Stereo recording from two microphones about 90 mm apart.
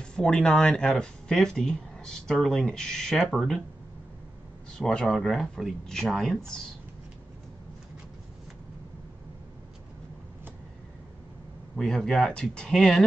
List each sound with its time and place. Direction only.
0.0 s speech: 10° left (ahead or behind)
4.7 s speech: 10° left (ahead or behind)
11.7 s speech: 5° left (ahead or behind)